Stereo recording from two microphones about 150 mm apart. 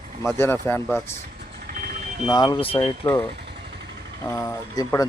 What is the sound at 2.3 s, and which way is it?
Speech, 25° left (ahead or behind).